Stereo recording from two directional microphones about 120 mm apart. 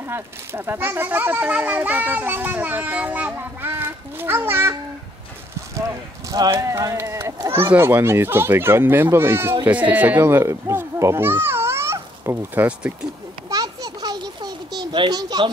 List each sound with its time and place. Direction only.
0.0 s speech: 20° right (ahead or behind)
5.8 s speech: 30° right (ahead or behind); by 12.9 s 15° right (ahead or behind)
13.5 s a sound: 30° right (ahead or behind)